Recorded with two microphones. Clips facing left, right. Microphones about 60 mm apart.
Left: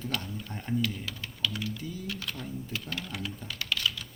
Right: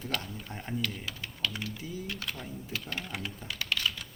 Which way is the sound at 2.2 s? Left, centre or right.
Centre.